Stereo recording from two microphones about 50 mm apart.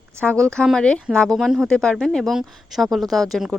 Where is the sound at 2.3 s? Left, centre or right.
Centre.